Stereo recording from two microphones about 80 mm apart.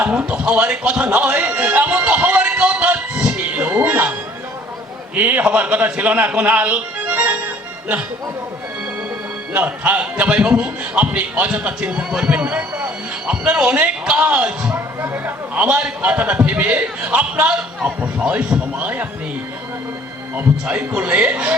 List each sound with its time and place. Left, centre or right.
0.0 s a man's voice: centre
5.1 s a man's voice: centre
9.5 s a man's voice: centre
20.3 s a man's voice: centre